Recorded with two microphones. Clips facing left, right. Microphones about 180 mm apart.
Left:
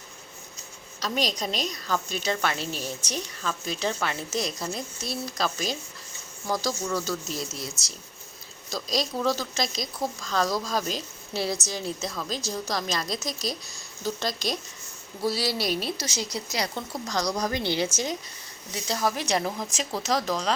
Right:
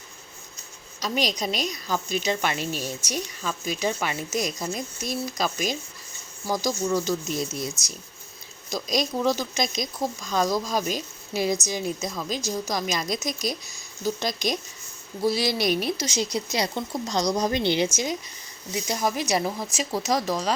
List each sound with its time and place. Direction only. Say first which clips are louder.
0.9 s a woman's voice: right 2 dB; 10° right (ahead or behind)
17.9 s a woman's voice: right 2 dB; 10° right (ahead or behind)